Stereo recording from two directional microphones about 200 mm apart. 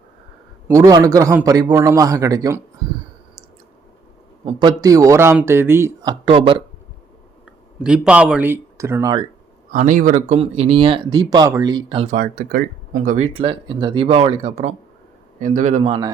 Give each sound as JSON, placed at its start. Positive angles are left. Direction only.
{"t": 0.7, "sound": "speech", "side_deg": -15}
{"t": 4.4, "sound": "speech", "side_deg": -20}
{"t": 7.9, "sound": "speech", "side_deg": -5}
{"t": 9.7, "sound": "speech", "side_deg": -40}
{"t": 12.0, "sound": "speech", "side_deg": -40}
{"t": 13.4, "sound": "a man's voice", "side_deg": -25}